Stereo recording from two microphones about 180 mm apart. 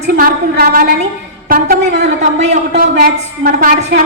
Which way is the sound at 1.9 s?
70° right (ahead or behind).